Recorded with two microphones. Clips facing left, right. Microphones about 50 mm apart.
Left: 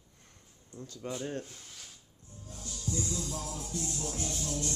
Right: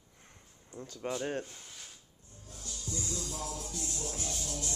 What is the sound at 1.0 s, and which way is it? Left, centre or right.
Speech, right.